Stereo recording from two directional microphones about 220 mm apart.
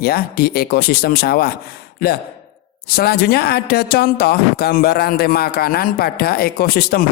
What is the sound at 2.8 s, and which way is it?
Speech, 45° left (ahead or behind).